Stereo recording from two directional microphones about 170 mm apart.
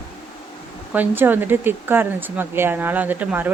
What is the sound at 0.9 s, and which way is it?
Speech, 10° right (ahead or behind).